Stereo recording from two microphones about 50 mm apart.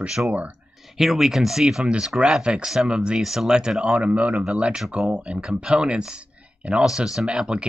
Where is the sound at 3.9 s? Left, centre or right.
Right.